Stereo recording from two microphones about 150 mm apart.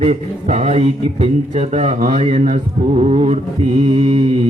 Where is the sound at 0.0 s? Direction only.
45° right (ahead or behind).